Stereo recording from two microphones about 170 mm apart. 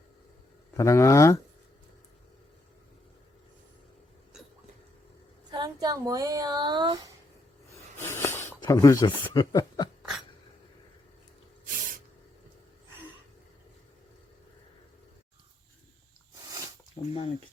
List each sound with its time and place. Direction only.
0.8 s speech: 15° left (ahead or behind)
5.5 s speech: 25° right (ahead or behind)
8.0 s snort: 15° left (ahead or behind)
8.6 s speech: 20° left (ahead or behind)
11.6 s spray: 55° right (ahead or behind)
17.0 s a sound: 45° left (ahead or behind)